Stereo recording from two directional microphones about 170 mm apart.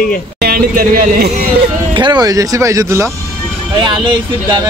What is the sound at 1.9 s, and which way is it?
Speech, 25° right (ahead or behind).